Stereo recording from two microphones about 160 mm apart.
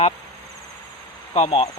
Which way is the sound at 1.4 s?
35° left (ahead or behind).